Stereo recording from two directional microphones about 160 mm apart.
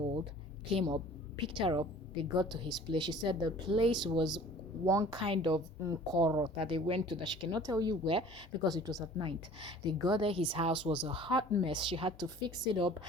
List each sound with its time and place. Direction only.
0.7 s a woman's voice: 35° right (ahead or behind)
5.2 s speech: 30° right (ahead or behind)